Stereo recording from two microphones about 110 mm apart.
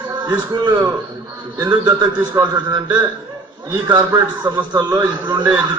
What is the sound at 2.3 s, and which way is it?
A man's voice, 40° right (ahead or behind).